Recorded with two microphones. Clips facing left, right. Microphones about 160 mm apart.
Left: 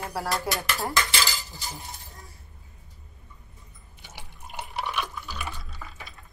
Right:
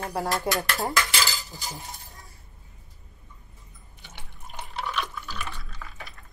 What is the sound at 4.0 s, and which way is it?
Water, 15° left (ahead or behind).